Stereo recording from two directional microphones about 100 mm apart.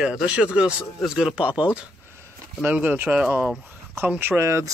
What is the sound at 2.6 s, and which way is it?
Speech, 15° right (ahead or behind).